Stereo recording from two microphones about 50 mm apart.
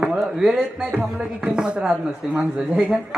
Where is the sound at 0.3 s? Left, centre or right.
Centre.